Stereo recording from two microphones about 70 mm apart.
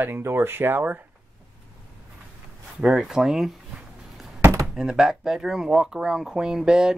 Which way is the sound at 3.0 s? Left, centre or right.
Centre.